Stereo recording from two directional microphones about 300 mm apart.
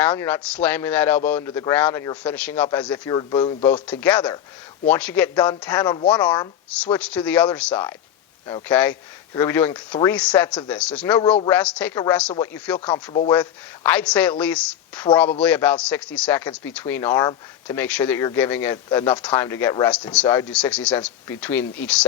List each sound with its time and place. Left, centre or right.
0.0 s a man's voice: centre
12.9 s speech: centre
13.3 s a man's voice: centre